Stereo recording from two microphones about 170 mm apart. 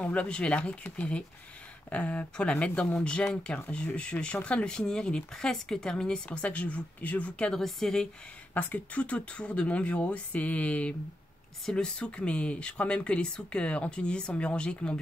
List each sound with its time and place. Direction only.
0.0 s speech: 10° left (ahead or behind)